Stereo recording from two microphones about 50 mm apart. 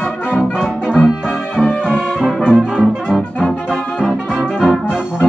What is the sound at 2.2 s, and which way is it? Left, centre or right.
Brass instrument, centre.